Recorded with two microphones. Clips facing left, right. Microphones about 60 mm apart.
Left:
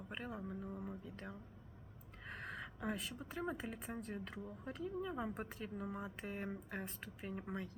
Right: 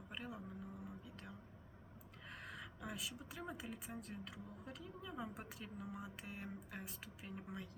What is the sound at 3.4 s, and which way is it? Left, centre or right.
A woman's voice, left.